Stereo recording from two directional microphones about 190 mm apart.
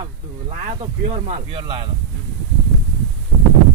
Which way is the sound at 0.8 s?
35° right (ahead or behind).